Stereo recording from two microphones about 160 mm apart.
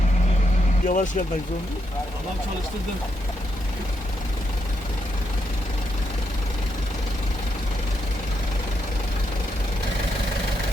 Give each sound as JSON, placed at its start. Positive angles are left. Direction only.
{"t": 0.9, "sound": "speech", "side_deg": 55}